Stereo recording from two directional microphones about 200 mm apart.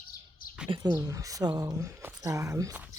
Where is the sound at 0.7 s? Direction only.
20° right (ahead or behind).